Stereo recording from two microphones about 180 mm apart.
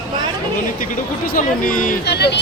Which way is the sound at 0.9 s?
50° left (ahead or behind).